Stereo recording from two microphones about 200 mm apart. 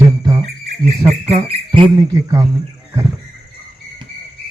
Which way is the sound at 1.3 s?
30° right (ahead or behind).